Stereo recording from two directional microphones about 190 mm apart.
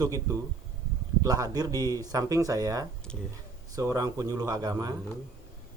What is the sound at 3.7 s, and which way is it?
Speech, 15° right (ahead or behind).